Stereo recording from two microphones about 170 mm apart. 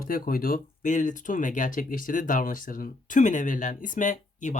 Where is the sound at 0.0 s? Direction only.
55° left (ahead or behind).